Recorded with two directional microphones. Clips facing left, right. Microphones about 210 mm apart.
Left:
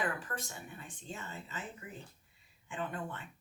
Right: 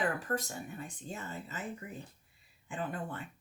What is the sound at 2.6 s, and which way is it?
Speech, 40° right (ahead or behind).